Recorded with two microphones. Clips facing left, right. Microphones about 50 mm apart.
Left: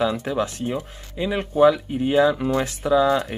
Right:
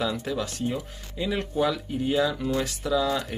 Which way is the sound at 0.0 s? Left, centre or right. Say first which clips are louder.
Left 6 dB; left.